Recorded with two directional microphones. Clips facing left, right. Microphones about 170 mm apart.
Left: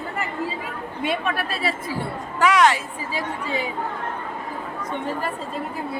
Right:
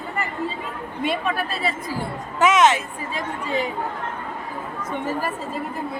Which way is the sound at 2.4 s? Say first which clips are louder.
Right 1 dB; 20° right (ahead or behind).